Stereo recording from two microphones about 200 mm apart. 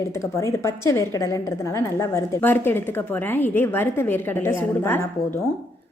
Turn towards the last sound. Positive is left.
turn(degrees=10)  # may be behind; listen again after turning